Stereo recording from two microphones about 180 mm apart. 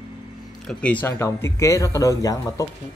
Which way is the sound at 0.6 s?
5° left (ahead or behind).